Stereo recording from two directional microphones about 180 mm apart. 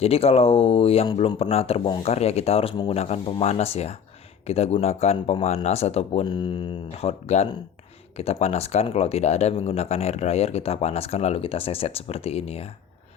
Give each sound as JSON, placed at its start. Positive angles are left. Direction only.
{"t": 0.0, "sound": "speech", "side_deg": 35}
{"t": 7.0, "sound": "speech", "side_deg": 35}